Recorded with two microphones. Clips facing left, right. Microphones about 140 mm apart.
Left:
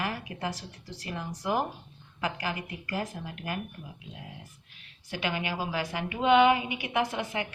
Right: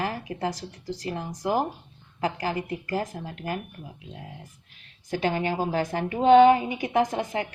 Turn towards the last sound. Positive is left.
turn(degrees=-40)  # may be behind; listen again after turning